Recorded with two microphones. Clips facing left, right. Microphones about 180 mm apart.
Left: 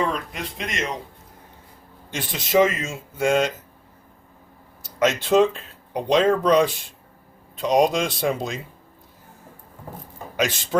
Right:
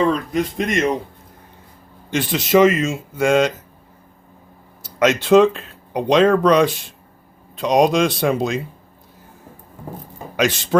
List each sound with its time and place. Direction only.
0.5 s speech: 50° right (ahead or behind)
2.0 s speech: 75° right (ahead or behind)
4.8 s speech: 85° right
10.3 s speech: 80° right